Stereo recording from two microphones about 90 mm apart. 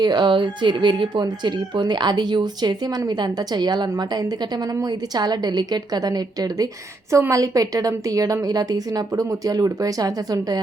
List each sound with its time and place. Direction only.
0.0 s a woman's voice: 55° right (ahead or behind)
7.1 s a woman's voice: 35° right (ahead or behind)